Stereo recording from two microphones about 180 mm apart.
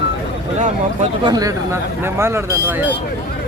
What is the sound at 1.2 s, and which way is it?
Speech, 20° right (ahead or behind).